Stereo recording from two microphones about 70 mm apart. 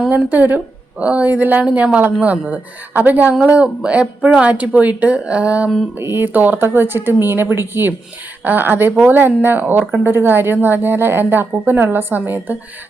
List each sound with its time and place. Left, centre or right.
0.1 s speech: right
6.0 s speech: right